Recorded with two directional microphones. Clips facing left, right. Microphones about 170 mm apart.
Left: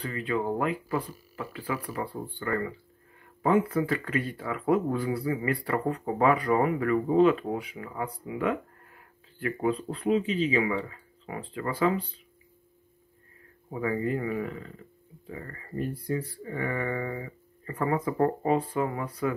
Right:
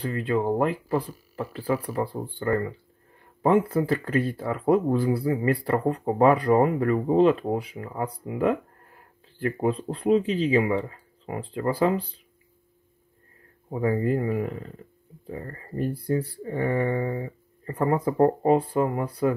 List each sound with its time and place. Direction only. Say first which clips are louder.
0.2 s speech: right 4 dB; 35° right (ahead or behind)
13.7 s speech: right 5 dB; 35° right (ahead or behind)